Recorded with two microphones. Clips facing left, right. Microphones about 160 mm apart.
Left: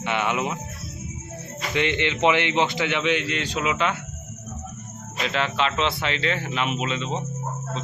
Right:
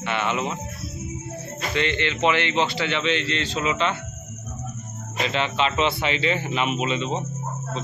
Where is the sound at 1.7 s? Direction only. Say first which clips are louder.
Left 1 dB; 15° left (ahead or behind).